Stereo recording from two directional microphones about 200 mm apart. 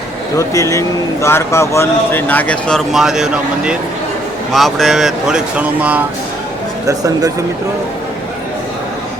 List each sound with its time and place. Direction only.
0.3 s speech: 15° left (ahead or behind); by 6.1 s 5° right (ahead or behind)
6.8 s speech: 20° right (ahead or behind)